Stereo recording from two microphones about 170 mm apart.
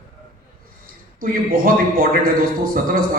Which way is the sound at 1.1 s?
60° right (ahead or behind).